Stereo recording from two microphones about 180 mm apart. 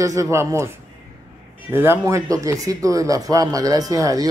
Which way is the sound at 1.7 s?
10° right (ahead or behind).